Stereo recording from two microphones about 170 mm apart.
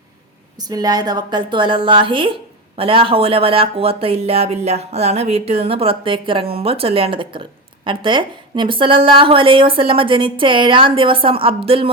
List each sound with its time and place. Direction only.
0.7 s a woman's voice: 25° right (ahead or behind)